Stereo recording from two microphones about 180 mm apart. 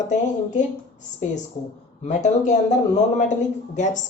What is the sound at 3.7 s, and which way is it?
Speech, 40° left (ahead or behind).